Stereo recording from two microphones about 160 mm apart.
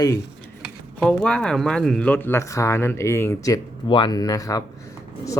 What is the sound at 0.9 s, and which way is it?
Speech, 5° left (ahead or behind).